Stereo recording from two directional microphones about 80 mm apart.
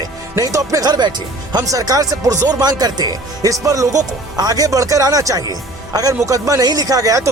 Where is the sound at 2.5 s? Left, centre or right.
Right.